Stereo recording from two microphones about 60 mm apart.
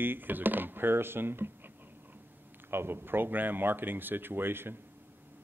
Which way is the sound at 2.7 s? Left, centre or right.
Right.